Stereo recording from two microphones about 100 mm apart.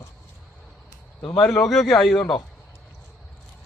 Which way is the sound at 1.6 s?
5° left (ahead or behind).